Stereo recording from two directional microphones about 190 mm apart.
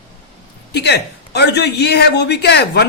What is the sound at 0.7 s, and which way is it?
Speech, 60° left (ahead or behind).